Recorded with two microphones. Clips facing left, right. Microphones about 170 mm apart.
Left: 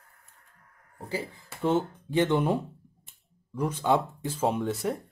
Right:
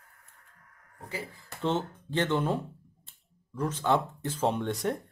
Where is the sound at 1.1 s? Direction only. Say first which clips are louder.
Left 5 dB; 25° left (ahead or behind).